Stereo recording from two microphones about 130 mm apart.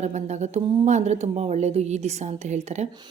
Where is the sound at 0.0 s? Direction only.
60° right (ahead or behind).